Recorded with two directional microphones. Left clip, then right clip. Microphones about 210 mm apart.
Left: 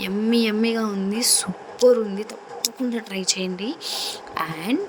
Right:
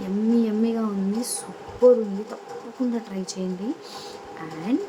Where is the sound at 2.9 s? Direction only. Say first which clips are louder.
Left 6 dB; 45° left (ahead or behind).